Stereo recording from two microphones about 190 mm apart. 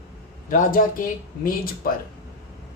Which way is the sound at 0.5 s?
45° left (ahead or behind).